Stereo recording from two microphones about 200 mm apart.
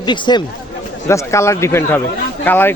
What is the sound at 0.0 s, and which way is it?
Speech, 20° left (ahead or behind).